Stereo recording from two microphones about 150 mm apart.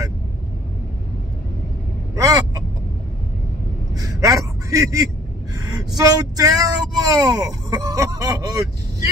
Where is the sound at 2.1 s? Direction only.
20° right (ahead or behind).